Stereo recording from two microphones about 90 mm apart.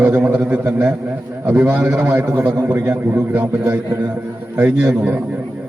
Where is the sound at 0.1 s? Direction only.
30° right (ahead or behind).